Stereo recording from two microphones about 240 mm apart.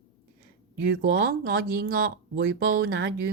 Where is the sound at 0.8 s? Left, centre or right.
Right.